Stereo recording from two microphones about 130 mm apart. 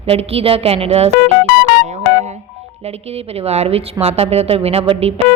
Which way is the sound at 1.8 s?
60° right (ahead or behind).